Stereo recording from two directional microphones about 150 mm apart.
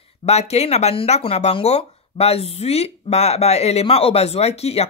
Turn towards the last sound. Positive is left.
turn(degrees=45)  # may be behind; listen again after turning